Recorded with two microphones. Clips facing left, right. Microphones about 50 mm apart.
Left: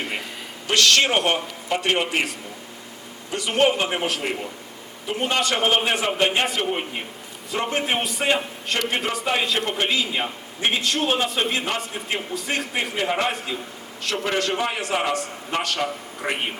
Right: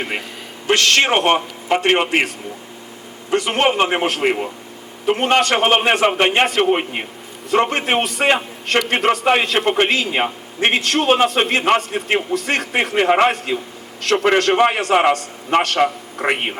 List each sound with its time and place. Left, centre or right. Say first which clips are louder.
0.7 s a man's voice: right 4 dB; right